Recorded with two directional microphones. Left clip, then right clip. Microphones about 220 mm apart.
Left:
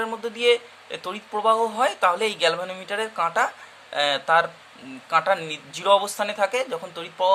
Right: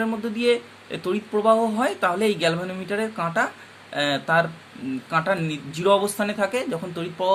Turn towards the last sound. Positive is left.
turn(degrees=15)  # may be behind; listen again after turning